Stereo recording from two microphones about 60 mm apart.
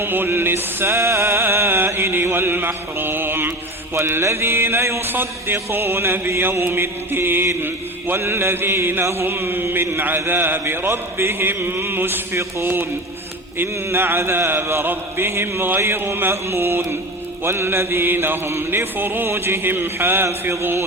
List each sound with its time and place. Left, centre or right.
0.0 s music: right
3.9 s mantra: right